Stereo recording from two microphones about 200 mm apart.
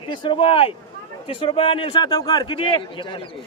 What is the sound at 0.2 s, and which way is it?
A man's voice, 25° left (ahead or behind).